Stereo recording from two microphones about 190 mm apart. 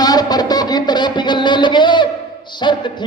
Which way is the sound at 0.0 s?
20° left (ahead or behind).